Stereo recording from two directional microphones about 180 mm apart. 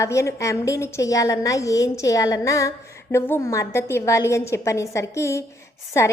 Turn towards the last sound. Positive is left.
turn(degrees=15)  # may be behind; listen again after turning